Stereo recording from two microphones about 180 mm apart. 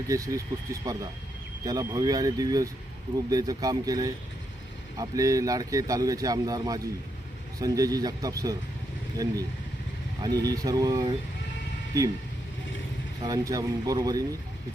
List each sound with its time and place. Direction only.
0.1 s speech: 20° right (ahead or behind)
13.2 s speech: 20° right (ahead or behind)